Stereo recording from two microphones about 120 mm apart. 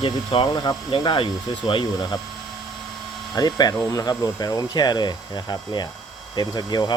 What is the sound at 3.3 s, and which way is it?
Speech, 35° left (ahead or behind).